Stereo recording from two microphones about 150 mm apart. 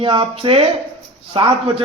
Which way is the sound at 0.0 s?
35° right (ahead or behind).